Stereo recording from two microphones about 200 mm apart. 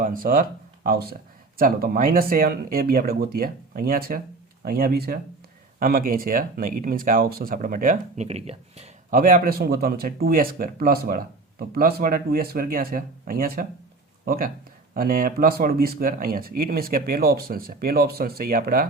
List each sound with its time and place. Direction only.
0.0 s speech: 45° right (ahead or behind)
9.1 s speech: 45° right (ahead or behind)